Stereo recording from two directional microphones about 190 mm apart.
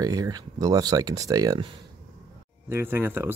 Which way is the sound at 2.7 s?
10° right (ahead or behind).